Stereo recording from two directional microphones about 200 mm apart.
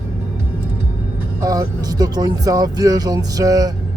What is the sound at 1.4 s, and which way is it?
Music, 15° right (ahead or behind).